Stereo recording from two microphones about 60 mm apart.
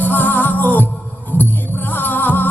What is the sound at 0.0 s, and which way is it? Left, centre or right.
Music, left.